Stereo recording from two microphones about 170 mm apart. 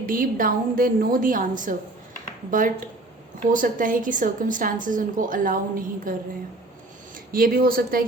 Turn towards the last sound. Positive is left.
turn(degrees=-60)  # may be behind; listen again after turning